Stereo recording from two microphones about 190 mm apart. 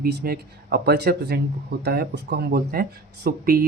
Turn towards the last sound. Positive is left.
turn(degrees=-50)  # may be behind; listen again after turning